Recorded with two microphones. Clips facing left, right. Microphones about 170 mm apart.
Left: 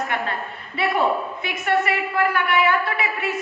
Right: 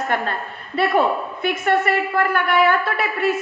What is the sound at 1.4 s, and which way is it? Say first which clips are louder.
A woman's voice: right 3 dB; 55° right (ahead or behind).